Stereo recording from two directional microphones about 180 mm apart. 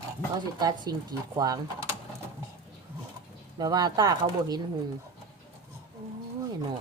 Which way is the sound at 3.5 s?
20° right (ahead or behind).